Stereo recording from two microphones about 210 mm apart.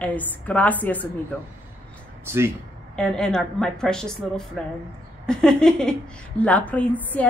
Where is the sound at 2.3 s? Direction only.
10° right (ahead or behind).